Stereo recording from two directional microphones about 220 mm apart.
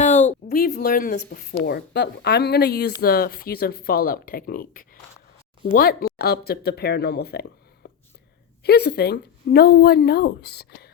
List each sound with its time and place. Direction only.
0.0 s speech: 35° left (ahead or behind)
8.6 s speech: 45° left (ahead or behind)